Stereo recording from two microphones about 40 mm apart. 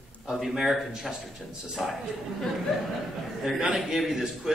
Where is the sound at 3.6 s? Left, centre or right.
Centre.